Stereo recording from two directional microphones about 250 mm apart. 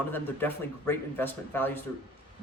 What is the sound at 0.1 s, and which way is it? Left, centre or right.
Speech, centre.